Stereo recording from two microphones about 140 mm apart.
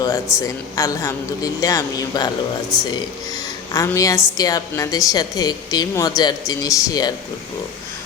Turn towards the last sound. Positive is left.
turn(degrees=25)  # may be behind; listen again after turning